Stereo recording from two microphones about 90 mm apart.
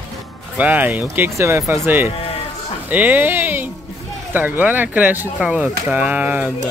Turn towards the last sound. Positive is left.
turn(degrees=-15)  # may be behind; listen again after turning